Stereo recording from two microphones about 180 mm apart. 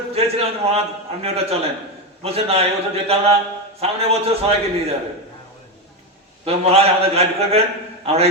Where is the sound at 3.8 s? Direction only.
35° right (ahead or behind).